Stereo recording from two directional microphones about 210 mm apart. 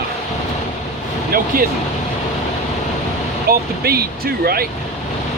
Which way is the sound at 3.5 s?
45° right (ahead or behind).